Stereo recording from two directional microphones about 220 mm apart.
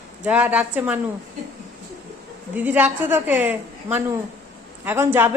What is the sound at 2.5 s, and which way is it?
A woman's voice, 5° right (ahead or behind).